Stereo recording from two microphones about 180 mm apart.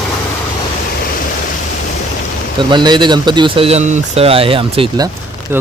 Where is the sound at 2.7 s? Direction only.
25° right (ahead or behind).